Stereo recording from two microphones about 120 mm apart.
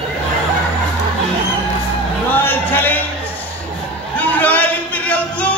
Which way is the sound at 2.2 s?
15° left (ahead or behind).